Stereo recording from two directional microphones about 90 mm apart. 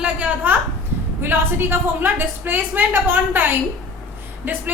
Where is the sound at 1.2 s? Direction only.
25° right (ahead or behind).